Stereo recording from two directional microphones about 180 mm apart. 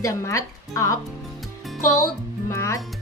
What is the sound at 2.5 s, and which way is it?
Speech, 15° left (ahead or behind).